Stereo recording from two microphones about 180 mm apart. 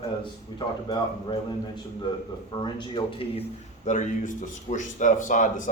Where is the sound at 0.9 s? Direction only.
25° left (ahead or behind).